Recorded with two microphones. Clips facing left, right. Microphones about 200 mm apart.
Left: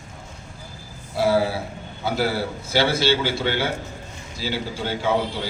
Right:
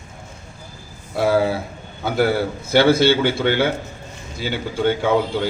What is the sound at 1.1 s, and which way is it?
A man's voice, 55° right (ahead or behind).